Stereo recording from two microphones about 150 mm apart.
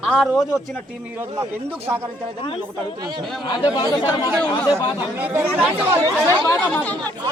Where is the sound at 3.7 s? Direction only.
30° left (ahead or behind).